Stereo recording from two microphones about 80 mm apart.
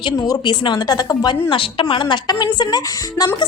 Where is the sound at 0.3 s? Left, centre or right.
Left.